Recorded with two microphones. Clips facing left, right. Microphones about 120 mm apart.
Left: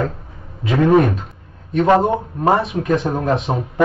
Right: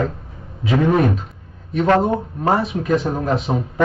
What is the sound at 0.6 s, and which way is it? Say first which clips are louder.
Speech: left 1 dB; centre (ahead or behind).